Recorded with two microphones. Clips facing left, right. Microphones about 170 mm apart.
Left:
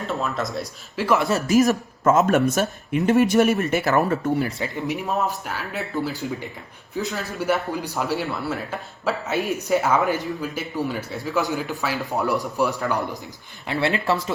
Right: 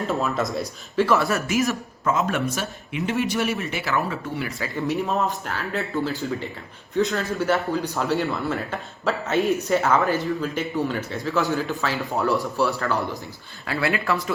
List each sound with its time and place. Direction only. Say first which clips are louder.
0.0 s a man's voice: right 2 dB; centre (ahead or behind)
1.0 s speech: left 1 dB; 15° left (ahead or behind)
1.3 s speech: left 5 dB; 35° left (ahead or behind)
4.4 s speech: even; 25° left (ahead or behind)
5.0 s a man's voice: even; 5° left (ahead or behind); by 14.2 s 25° left (ahead or behind)